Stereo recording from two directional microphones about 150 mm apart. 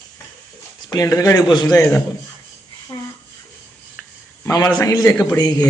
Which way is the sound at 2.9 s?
25° left (ahead or behind).